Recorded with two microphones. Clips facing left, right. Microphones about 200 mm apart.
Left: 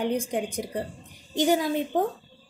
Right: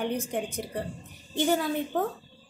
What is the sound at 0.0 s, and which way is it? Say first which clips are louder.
Speech: left 3 dB; 15° left (ahead or behind).